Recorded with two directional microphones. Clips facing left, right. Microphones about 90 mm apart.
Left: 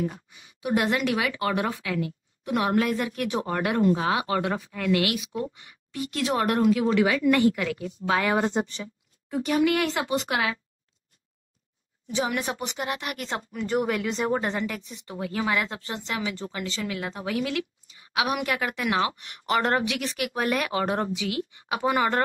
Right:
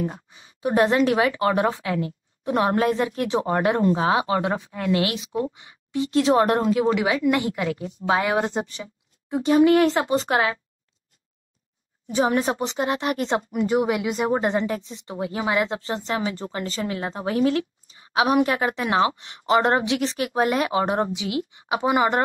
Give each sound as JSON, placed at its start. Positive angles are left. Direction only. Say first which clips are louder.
{"t": 0.0, "sound": "a woman's voice", "louder": "right 2 dB", "side_deg": -30}
{"t": 8.4, "sound": "speech", "louder": "right 1 dB", "side_deg": -5}
{"t": 9.3, "sound": "speech", "louder": "right 6 dB", "side_deg": -25}
{"t": 12.1, "sound": "a woman's voice", "louder": "right 6 dB", "side_deg": -40}